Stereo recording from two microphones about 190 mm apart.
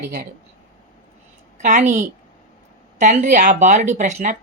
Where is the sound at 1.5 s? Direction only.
40° right (ahead or behind).